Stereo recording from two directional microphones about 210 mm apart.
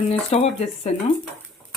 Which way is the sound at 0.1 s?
30° left (ahead or behind).